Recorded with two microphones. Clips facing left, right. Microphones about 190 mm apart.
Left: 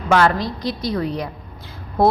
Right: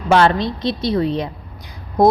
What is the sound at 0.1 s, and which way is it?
A woman's voice, 25° right (ahead or behind).